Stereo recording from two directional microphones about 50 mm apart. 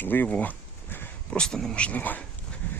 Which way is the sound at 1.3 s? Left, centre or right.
Centre.